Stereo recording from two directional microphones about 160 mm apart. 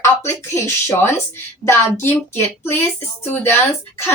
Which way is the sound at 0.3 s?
15° left (ahead or behind).